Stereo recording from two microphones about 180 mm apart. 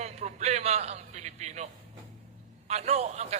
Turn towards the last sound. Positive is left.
turn(degrees=-40)  # may be behind; listen again after turning